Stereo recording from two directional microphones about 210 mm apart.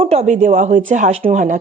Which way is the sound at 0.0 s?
30° right (ahead or behind).